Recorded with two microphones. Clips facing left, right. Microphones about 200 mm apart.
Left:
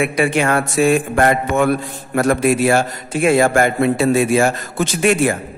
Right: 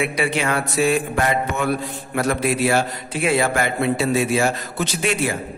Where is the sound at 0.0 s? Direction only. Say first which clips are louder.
Left 5 dB; 50° left (ahead or behind).